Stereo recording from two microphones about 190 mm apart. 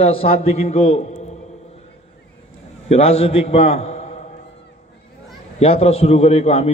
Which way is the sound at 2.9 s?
35° left (ahead or behind).